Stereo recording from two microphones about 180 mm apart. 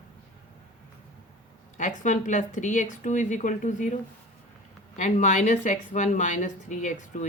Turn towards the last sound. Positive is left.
turn(degrees=45)  # may be behind; listen again after turning